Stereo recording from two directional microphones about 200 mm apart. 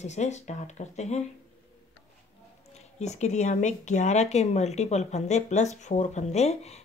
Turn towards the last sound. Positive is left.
turn(degrees=30)  # may be behind; listen again after turning